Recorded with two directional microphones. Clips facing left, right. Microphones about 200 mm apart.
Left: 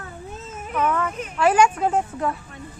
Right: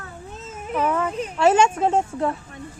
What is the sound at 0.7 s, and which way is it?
Speech, 30° right (ahead or behind).